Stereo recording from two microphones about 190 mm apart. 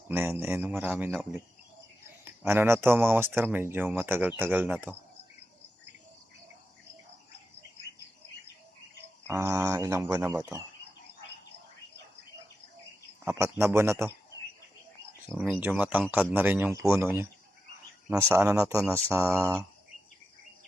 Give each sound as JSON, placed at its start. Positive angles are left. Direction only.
{"t": 0.1, "sound": "speech", "side_deg": -10}
{"t": 2.5, "sound": "speech", "side_deg": -10}
{"t": 9.2, "sound": "speech", "side_deg": -10}
{"t": 13.2, "sound": "speech", "side_deg": -10}
{"t": 15.3, "sound": "speech", "side_deg": 5}
{"t": 15.6, "sound": "speech", "side_deg": -5}
{"t": 18.3, "sound": "speech", "side_deg": -5}